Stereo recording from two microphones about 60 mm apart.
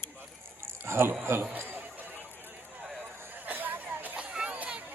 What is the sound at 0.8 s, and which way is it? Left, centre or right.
Speech, right.